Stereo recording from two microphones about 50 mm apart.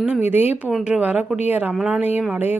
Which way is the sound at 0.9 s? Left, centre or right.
Right.